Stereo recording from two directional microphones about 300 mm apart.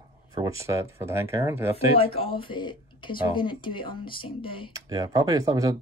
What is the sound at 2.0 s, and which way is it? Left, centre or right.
Speech, centre.